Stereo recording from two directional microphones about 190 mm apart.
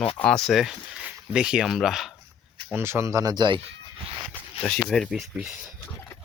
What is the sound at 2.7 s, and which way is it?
Speech, 15° right (ahead or behind).